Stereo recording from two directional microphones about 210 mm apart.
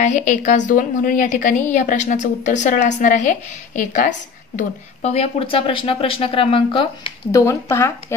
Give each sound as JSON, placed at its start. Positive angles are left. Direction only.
{"t": 0.0, "sound": "a woman's voice", "side_deg": 35}
{"t": 7.3, "sound": "speech", "side_deg": 10}